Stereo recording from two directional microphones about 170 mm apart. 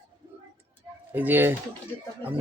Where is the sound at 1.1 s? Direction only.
10° right (ahead or behind).